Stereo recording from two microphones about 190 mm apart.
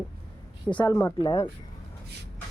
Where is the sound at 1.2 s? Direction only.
25° left (ahead or behind).